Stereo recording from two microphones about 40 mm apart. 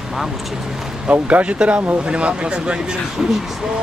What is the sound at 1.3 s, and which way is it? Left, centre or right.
Speech, right.